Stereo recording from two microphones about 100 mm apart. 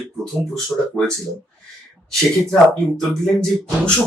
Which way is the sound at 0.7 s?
15° left (ahead or behind).